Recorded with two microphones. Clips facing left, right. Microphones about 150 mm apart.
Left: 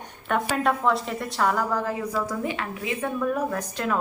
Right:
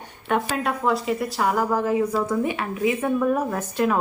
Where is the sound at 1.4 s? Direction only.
20° right (ahead or behind).